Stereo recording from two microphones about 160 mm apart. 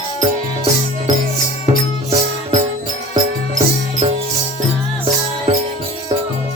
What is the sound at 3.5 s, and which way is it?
Music, 50° right (ahead or behind).